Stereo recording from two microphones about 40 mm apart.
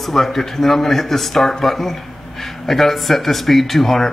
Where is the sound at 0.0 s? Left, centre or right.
Centre.